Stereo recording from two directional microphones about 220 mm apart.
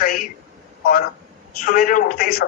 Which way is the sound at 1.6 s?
40° left (ahead or behind).